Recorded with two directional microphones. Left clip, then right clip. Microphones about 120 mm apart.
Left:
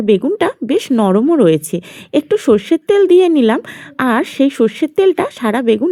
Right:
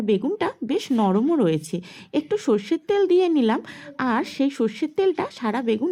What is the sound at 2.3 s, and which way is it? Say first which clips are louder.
Speech: left 10 dB; 35° left (ahead or behind).